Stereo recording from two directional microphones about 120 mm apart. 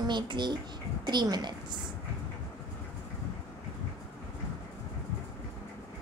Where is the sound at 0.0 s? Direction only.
40° right (ahead or behind).